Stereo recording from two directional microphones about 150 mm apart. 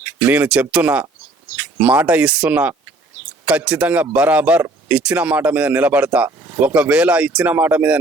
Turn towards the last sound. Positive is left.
turn(degrees=-10)  # may be behind; listen again after turning